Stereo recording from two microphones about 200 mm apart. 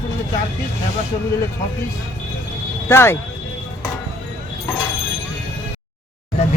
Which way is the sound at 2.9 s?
15° left (ahead or behind).